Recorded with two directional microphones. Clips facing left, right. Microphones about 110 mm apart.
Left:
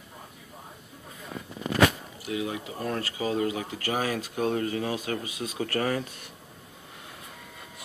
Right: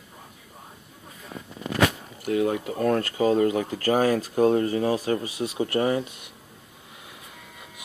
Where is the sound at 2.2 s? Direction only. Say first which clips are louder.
Right 8 dB; 45° right (ahead or behind); by 6.3 s 15° right (ahead or behind).